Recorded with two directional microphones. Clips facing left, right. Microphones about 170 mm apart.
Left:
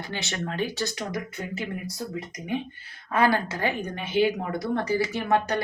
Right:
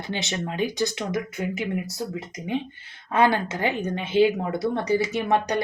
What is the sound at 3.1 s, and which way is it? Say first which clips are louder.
Speech: right 2 dB; 20° right (ahead or behind).